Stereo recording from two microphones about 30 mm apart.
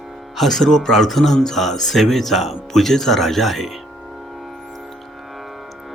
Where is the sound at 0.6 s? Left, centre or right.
Centre.